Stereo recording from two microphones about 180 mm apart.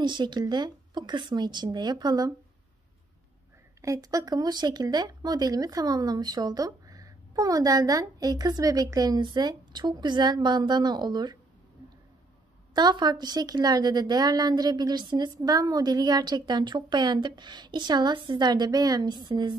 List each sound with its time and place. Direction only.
0.0 s speech: 25° right (ahead or behind)
3.8 s speech: 20° right (ahead or behind)
12.7 s speech: 25° right (ahead or behind)